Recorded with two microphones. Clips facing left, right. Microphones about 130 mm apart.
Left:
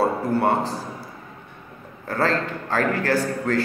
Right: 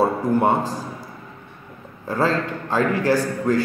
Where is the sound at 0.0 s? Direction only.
15° right (ahead or behind).